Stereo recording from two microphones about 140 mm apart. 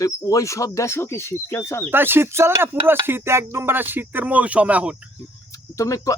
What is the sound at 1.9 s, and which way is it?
Speech, 15° right (ahead or behind).